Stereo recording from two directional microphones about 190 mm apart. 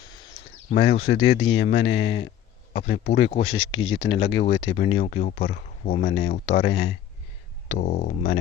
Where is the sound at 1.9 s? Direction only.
75° left (ahead or behind).